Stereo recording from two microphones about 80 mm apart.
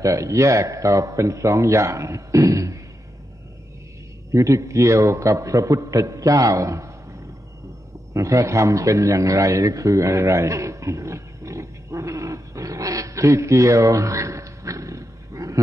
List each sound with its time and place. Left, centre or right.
0.0 s a man's voice: right
4.3 s a man's voice: right
8.1 s a sound: right